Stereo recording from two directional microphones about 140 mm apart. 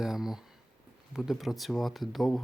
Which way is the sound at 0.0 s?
5° right (ahead or behind).